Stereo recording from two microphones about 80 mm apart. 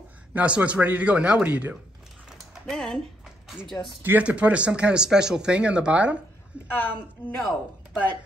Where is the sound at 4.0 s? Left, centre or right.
Right.